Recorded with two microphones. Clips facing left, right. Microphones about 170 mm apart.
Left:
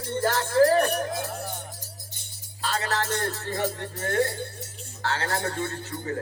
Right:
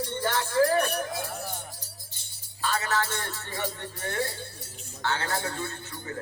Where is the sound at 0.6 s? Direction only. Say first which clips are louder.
Left 4 dB; 45° left (ahead or behind).